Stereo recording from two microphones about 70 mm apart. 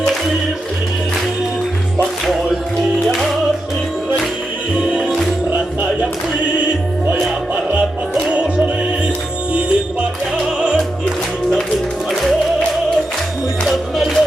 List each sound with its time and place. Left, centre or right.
4.9 s music: centre
8.1 s music: centre
13.9 s music: centre